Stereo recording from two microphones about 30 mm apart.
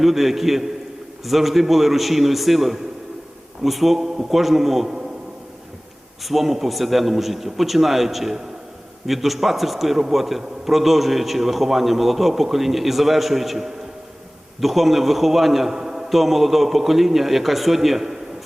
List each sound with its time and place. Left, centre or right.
0.0 s a man's voice: centre
6.2 s a man's voice: centre
15.7 s a sound: centre
16.0 s a man's voice: centre